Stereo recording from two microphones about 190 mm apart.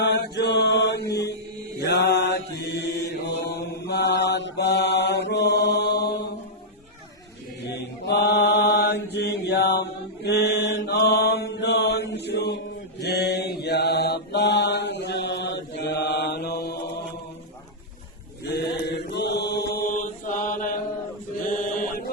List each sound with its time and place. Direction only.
0.0 s mantra: 60° left (ahead or behind)
7.7 s mantra: 60° left (ahead or behind)
18.5 s mantra: 60° left (ahead or behind)
19.8 s mantra: 45° left (ahead or behind)